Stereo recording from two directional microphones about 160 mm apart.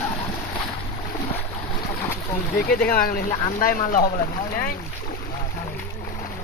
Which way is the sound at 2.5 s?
70° left (ahead or behind).